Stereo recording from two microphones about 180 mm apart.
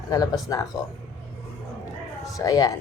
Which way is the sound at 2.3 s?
20° left (ahead or behind).